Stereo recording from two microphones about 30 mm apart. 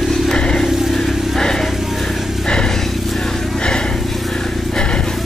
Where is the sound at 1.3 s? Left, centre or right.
Centre.